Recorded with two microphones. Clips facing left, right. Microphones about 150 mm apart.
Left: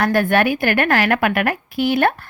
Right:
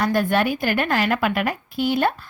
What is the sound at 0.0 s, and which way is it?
A woman's voice, 70° left (ahead or behind).